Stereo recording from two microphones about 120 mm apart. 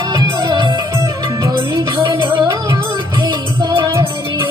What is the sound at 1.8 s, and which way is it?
Music, 40° right (ahead or behind).